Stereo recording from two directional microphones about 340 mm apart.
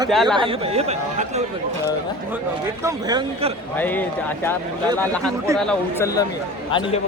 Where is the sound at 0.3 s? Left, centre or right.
Centre.